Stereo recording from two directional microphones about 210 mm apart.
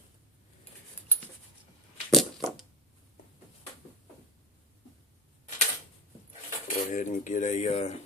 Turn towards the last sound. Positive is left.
turn(degrees=30)  # may be behind; listen again after turning